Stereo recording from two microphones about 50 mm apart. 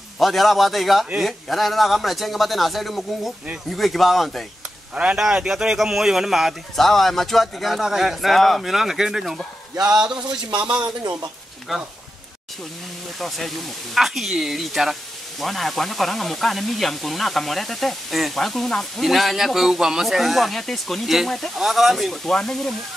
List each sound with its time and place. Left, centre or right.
0.2 s speech: centre
5.1 s speech: centre
11.7 s speech: centre
13.2 s speech: centre